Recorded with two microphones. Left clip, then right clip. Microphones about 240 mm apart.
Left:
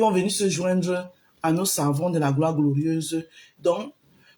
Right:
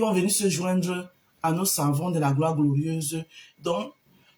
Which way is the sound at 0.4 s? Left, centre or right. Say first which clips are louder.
Left 3 dB; centre.